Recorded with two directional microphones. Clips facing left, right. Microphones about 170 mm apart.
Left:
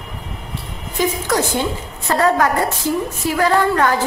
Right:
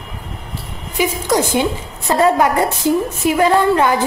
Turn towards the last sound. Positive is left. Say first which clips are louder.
# right 2 dB
turn(degrees=-20)  # may be behind; listen again after turning